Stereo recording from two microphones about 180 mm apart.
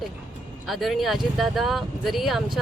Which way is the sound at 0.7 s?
Centre (ahead or behind).